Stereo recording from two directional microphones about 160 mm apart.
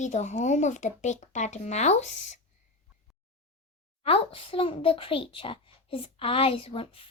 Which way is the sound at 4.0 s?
35° left (ahead or behind).